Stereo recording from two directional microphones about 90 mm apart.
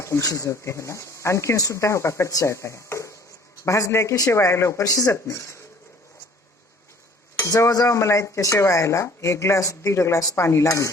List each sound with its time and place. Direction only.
0.0 s speech: 35° left (ahead or behind)
7.3 s speech: 35° left (ahead or behind)